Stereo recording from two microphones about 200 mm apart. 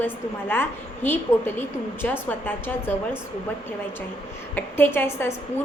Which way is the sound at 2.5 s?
10° left (ahead or behind).